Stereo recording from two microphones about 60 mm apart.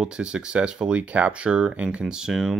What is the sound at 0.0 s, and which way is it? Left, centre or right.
Speech, centre.